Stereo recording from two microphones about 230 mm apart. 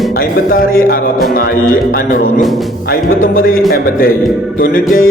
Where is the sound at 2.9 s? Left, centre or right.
Left.